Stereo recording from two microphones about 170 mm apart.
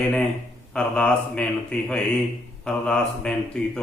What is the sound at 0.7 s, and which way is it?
A man's voice, 5° left (ahead or behind).